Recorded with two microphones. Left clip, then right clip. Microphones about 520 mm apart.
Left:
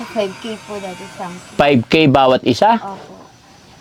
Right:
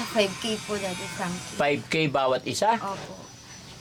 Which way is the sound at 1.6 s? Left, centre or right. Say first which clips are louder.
Left 12 dB; left.